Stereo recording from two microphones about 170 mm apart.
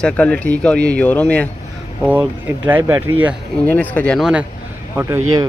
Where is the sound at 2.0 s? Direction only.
10° right (ahead or behind).